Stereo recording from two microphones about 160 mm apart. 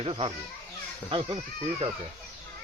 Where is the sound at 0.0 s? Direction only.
35° right (ahead or behind).